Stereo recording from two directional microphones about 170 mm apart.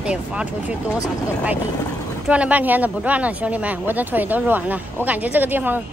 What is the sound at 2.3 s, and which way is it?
Speech, 10° right (ahead or behind).